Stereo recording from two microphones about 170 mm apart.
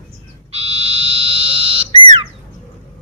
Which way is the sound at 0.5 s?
35° right (ahead or behind).